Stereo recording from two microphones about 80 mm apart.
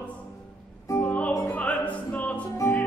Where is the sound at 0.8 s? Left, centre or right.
Left.